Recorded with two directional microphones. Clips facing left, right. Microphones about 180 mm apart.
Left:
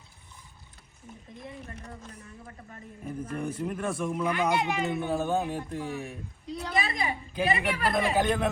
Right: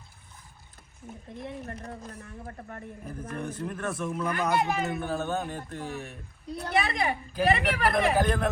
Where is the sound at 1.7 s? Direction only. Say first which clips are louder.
Right 4 dB; 40° right (ahead or behind).